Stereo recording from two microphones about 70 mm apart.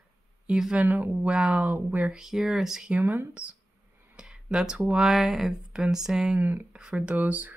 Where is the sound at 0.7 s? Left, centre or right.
Right.